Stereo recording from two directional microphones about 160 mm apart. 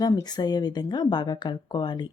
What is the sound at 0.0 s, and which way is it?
Speech, 25° left (ahead or behind).